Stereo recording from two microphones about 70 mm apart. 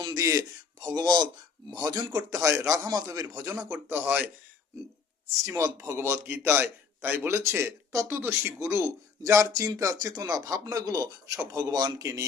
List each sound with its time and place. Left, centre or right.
0.0 s a sound: right
0.9 s speech: right
1.7 s a man's voice: right
2.9 s a man's voice: right
3.7 s speech: right
5.4 s a man's voice: right